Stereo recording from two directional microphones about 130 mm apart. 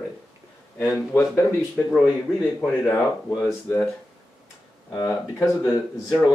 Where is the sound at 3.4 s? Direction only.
15° left (ahead or behind).